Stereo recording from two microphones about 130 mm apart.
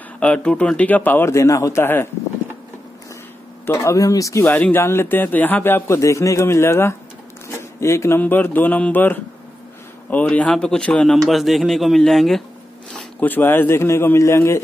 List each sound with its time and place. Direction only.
0.2 s a man's voice: 10° left (ahead or behind)
3.6 s a man's voice: 20° left (ahead or behind)
4.5 s a man's voice: 10° left (ahead or behind)
12.9 s a man's voice: 10° left (ahead or behind)